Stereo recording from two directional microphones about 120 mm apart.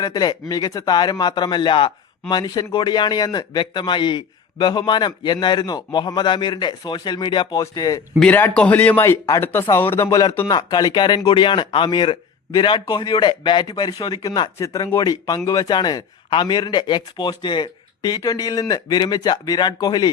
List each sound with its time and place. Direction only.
0.0 s speech: 35° left (ahead or behind)
8.2 s a man's voice: 15° left (ahead or behind); by 20.1 s 35° left (ahead or behind)